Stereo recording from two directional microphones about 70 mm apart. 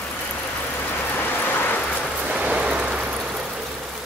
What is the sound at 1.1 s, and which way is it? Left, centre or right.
Rain, left.